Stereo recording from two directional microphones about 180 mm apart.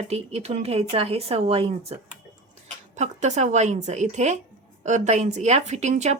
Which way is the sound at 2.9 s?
40° right (ahead or behind).